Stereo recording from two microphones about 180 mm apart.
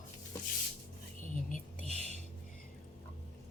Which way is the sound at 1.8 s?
35° right (ahead or behind).